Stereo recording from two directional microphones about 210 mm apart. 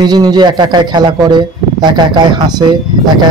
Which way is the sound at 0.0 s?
20° right (ahead or behind).